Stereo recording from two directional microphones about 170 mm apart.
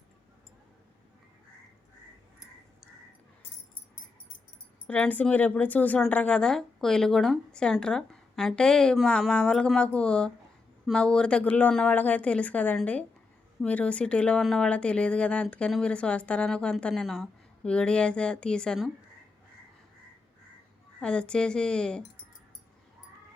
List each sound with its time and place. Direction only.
4.9 s speech: 10° left (ahead or behind)
21.0 s speech: 5° left (ahead or behind)